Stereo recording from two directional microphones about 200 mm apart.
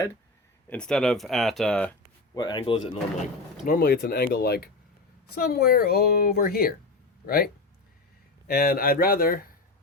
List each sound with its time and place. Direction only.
0.7 s speech: 5° left (ahead or behind)
2.3 s speech: 20° left (ahead or behind)
3.7 s a woman's voice: 50° left (ahead or behind)